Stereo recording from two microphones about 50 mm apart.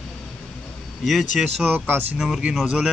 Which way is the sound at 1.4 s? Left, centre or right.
Centre.